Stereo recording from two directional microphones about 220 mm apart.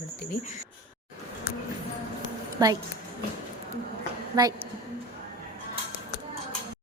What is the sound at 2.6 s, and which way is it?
Speech, 20° right (ahead or behind).